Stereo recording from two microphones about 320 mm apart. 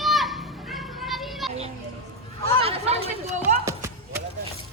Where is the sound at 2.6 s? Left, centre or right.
Centre.